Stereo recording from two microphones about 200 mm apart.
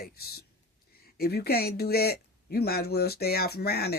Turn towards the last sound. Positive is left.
turn(degrees=50)  # may be behind; listen again after turning